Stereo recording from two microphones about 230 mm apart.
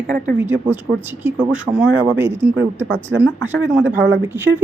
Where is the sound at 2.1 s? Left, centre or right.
Right.